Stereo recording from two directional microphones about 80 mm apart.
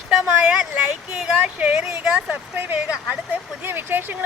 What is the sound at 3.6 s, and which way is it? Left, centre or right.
Speech, right.